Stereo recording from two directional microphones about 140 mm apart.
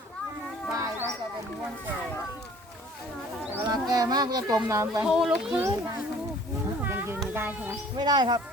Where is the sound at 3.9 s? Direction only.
25° right (ahead or behind).